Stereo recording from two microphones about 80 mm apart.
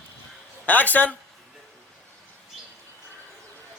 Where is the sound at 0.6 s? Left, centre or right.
Left.